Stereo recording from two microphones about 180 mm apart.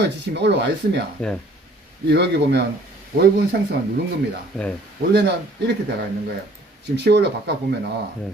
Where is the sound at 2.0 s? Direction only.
70° right (ahead or behind).